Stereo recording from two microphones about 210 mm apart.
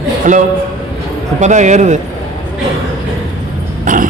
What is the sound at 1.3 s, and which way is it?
Speech, 35° right (ahead or behind).